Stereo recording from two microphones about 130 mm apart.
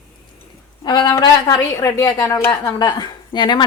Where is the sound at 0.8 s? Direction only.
30° left (ahead or behind).